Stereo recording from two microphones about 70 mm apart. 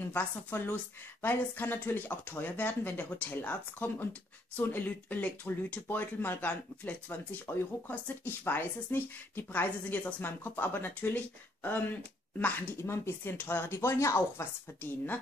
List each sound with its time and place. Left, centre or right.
0.1 s speech: left
12.8 s speech: left
13.7 s speech: left